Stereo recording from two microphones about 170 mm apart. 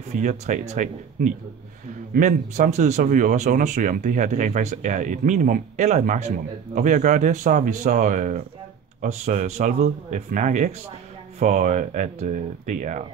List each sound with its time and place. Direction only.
0.1 s speech: 45° right (ahead or behind)